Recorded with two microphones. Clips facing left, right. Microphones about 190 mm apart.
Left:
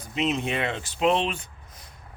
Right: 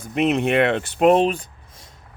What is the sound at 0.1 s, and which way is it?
Speech, 60° right (ahead or behind).